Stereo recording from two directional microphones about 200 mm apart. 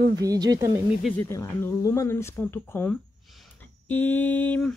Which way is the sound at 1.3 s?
15° left (ahead or behind).